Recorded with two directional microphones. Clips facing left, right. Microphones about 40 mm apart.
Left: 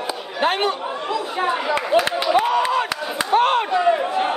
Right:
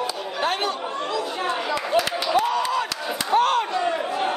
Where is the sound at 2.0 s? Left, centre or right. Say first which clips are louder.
Left 2 dB; left.